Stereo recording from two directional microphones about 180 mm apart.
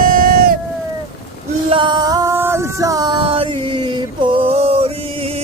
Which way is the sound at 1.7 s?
25° right (ahead or behind).